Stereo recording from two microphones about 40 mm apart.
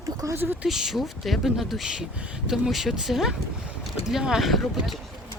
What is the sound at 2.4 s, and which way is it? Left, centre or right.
Speech, centre.